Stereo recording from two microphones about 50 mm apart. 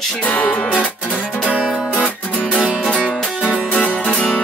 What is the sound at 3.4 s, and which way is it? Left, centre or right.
Music, left.